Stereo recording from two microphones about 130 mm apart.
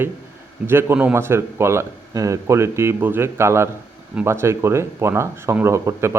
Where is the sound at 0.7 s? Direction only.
20° right (ahead or behind).